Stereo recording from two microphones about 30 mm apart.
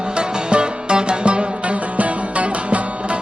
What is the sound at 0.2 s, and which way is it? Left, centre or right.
Music, right.